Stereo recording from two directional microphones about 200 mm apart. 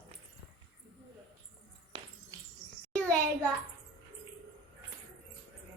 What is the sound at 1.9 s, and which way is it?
Insect, 25° right (ahead or behind).